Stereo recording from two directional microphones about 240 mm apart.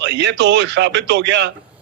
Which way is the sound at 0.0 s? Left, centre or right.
Right.